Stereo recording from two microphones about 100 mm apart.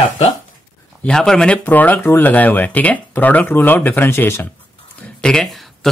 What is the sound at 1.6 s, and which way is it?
Speech, 15° left (ahead or behind).